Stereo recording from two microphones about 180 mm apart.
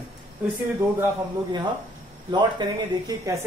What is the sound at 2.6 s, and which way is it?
Speech, 25° right (ahead or behind).